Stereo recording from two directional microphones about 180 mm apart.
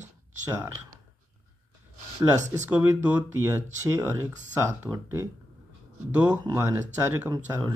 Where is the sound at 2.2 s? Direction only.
15° right (ahead or behind).